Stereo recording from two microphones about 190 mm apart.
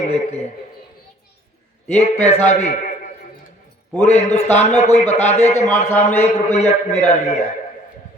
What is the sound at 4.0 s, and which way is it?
A man's voice, 35° left (ahead or behind).